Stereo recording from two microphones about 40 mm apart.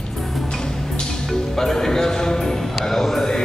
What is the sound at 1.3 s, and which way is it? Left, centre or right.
Music, centre.